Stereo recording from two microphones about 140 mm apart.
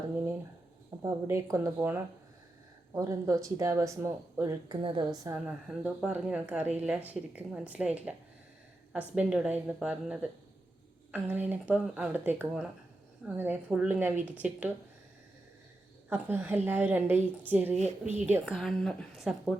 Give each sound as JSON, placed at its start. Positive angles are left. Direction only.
{"t": 1.0, "sound": "speech", "side_deg": -20}
{"t": 4.8, "sound": "a woman's voice", "side_deg": -35}
{"t": 5.3, "sound": "speech", "side_deg": -10}
{"t": 9.1, "sound": "speech", "side_deg": -5}
{"t": 16.0, "sound": "speech", "side_deg": -15}
{"t": 17.7, "sound": "a woman's voice", "side_deg": -55}
{"t": 18.4, "sound": "speech", "side_deg": 0}